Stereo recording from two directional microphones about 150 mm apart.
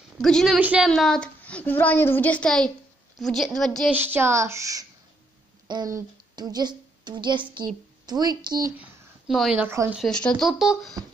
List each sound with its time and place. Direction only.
0.2 s speech: centre (ahead or behind)
0.6 s speech: 10° right (ahead or behind)
0.8 s a child's voice: 5° left (ahead or behind)
3.9 s speech: 15° right (ahead or behind)
9.3 s speech: centre (ahead or behind)